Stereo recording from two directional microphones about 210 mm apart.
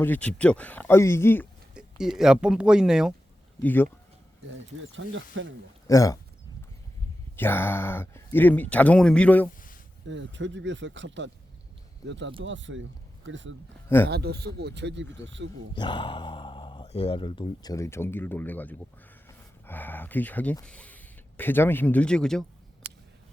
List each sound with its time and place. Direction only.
0.0 s speech: 5° left (ahead or behind)
1.7 s speech: 5° right (ahead or behind)
3.6 s speech: 10° left (ahead or behind)
4.9 s speech: 65° right (ahead or behind)
5.9 s speech: 15° left (ahead or behind)
7.3 s speech: 10° left (ahead or behind)
10.1 s speech: 60° right (ahead or behind)
13.8 s speech: 10° left (ahead or behind)
14.1 s speech: 50° right (ahead or behind)
15.7 s speech: 20° left (ahead or behind); by 22.4 s 5° left (ahead or behind)